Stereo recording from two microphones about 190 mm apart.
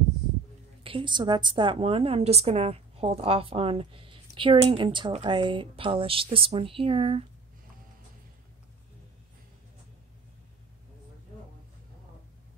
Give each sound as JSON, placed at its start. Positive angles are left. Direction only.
{"t": 0.8, "sound": "a woman's voice", "side_deg": -25}